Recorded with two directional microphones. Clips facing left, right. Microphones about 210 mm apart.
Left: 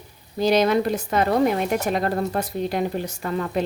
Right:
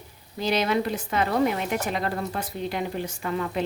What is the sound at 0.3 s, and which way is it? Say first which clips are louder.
Speech: left 6 dB; 40° left (ahead or behind).